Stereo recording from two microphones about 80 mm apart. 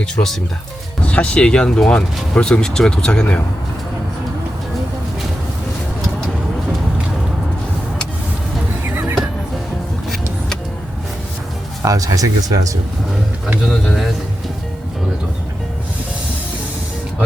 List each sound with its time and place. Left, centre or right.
0.0 s speech: centre
1.0 s speech: centre
8.8 s a sound: right
11.8 s speech: right
13.7 s speech: centre